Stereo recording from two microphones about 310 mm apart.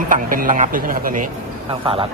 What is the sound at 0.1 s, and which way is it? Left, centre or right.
A man's voice, right.